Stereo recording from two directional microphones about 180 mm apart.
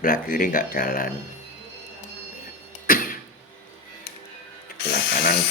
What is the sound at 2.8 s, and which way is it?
Cough, 50° left (ahead or behind).